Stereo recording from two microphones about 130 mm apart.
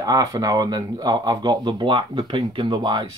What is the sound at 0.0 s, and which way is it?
Speech, 30° right (ahead or behind).